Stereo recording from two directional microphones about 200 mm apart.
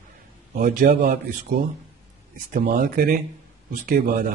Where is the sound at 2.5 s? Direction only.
45° right (ahead or behind).